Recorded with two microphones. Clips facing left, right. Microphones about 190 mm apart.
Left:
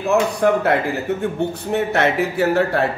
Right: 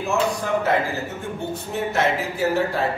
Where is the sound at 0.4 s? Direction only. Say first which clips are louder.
Left 5 dB; 65° left (ahead or behind).